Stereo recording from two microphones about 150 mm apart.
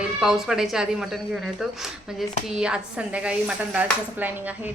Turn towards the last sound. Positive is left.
turn(degrees=-10)  # may be behind; listen again after turning